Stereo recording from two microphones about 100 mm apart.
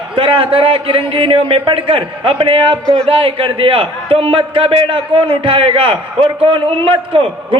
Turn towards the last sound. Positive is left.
turn(degrees=-65)  # may be behind; listen again after turning